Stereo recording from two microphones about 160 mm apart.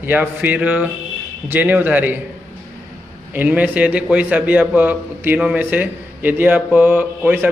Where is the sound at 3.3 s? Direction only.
10° right (ahead or behind).